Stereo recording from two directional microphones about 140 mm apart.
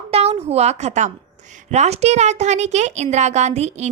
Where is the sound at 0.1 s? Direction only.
45° right (ahead or behind).